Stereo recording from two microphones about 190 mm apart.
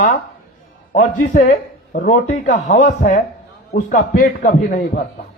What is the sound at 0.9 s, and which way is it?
A man's voice, 40° left (ahead or behind).